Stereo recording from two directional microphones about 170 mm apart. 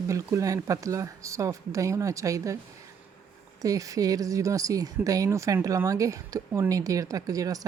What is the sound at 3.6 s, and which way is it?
Speech, 20° right (ahead or behind).